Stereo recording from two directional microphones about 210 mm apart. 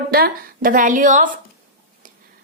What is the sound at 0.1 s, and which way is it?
A woman's voice, 45° right (ahead or behind).